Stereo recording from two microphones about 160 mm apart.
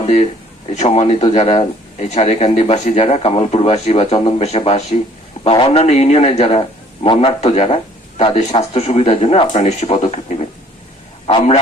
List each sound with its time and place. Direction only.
0.0 s a man's voice: 40° left (ahead or behind)